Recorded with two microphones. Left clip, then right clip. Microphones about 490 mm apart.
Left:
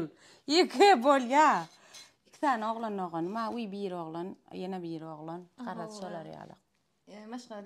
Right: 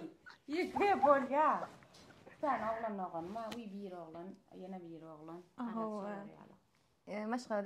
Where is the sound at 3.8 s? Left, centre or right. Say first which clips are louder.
Left 11 dB; left.